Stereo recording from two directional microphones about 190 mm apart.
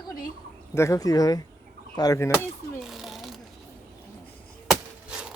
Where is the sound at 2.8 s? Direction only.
Centre (ahead or behind).